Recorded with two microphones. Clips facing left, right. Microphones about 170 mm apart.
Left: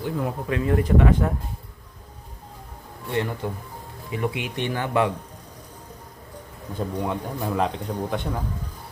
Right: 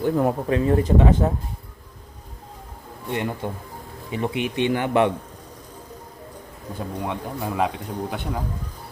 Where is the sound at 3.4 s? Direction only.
20° right (ahead or behind).